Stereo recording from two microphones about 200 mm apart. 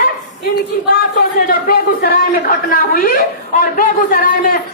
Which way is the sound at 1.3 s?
45° left (ahead or behind).